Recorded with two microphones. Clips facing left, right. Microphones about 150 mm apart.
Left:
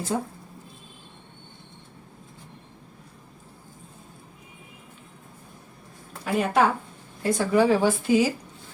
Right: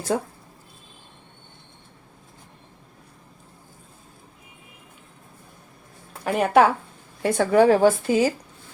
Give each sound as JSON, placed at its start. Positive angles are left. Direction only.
{"t": 6.2, "sound": "speech", "side_deg": -65}